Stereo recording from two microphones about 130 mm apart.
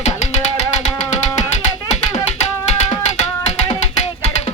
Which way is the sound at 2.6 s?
55° left (ahead or behind).